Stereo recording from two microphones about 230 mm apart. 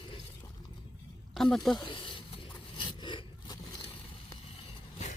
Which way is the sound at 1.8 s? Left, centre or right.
Left.